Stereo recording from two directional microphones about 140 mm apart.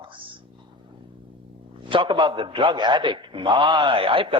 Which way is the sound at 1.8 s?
35° right (ahead or behind).